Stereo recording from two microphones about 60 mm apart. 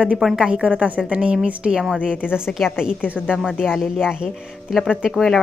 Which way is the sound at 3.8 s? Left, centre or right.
Centre.